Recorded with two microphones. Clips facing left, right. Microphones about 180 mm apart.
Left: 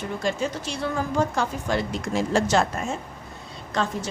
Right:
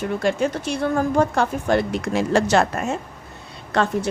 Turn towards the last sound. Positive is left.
turn(degrees=-60)  # may be behind; listen again after turning